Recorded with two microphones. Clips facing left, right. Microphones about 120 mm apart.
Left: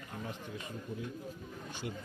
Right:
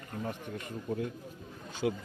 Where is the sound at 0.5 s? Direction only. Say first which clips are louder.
Right 6 dB; 60° right (ahead or behind).